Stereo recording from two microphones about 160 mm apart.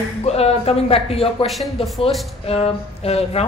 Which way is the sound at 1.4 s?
Centre (ahead or behind).